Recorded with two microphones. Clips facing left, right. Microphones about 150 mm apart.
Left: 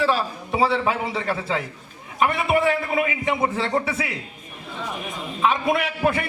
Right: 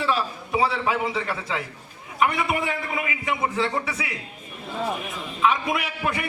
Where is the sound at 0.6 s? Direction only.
30° left (ahead or behind).